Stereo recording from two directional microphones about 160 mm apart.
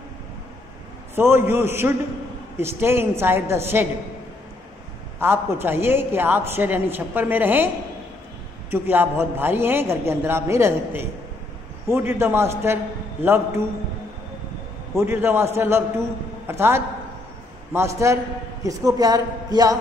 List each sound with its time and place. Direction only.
1.1 s a woman's voice: 15° right (ahead or behind)
5.2 s a woman's voice: 15° right (ahead or behind)
15.0 s a woman's voice: 15° right (ahead or behind)